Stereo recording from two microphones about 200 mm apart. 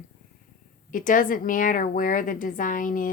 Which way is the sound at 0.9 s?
40° left (ahead or behind).